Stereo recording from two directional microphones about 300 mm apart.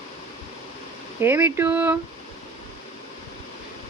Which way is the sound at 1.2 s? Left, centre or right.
Centre.